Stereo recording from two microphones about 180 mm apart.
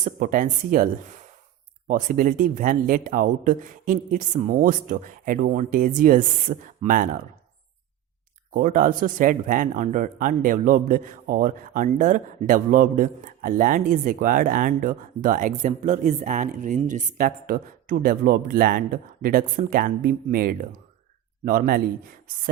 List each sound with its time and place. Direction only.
0.0 s speech: 45° right (ahead or behind)
1.9 s speech: 50° right (ahead or behind)
8.5 s speech: 50° right (ahead or behind)